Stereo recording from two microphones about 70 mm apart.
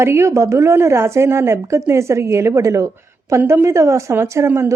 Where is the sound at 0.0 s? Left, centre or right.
Right.